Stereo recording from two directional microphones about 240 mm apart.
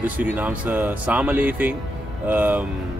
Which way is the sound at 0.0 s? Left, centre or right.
Centre.